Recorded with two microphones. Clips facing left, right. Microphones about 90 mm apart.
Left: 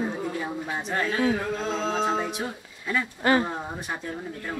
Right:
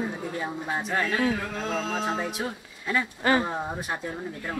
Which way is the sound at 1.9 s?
Centre (ahead or behind).